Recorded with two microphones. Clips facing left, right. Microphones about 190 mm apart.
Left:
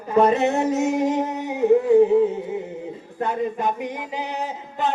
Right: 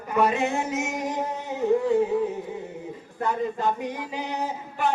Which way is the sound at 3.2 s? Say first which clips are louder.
Left 2 dB; 20° left (ahead or behind).